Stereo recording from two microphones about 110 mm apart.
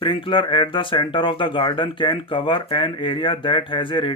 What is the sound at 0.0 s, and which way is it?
Speech, 50° left (ahead or behind).